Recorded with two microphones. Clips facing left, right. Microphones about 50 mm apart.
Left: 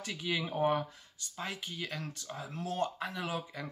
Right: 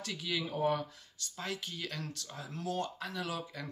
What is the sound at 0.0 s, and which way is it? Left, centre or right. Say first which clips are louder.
Speech: left 2 dB; centre.